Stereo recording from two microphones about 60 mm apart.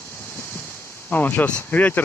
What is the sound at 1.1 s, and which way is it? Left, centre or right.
Speech, left.